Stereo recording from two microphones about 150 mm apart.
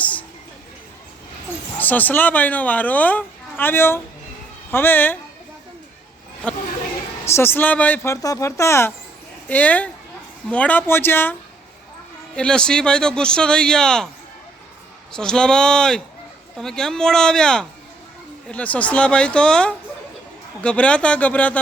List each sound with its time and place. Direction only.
0.0 s music: 10° left (ahead or behind)
1.8 s speech: 10° left (ahead or behind)
7.3 s speech: 15° left (ahead or behind)
12.4 s speech: 5° left (ahead or behind)
15.1 s speech: 5° left (ahead or behind)